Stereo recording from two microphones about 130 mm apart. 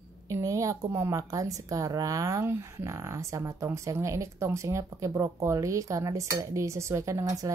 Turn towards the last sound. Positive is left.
turn(degrees=-25)  # may be behind; listen again after turning